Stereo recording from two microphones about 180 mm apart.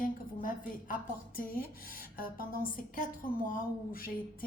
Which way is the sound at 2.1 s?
50° left (ahead or behind).